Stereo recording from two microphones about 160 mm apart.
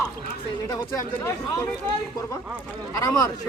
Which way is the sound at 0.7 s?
20° left (ahead or behind).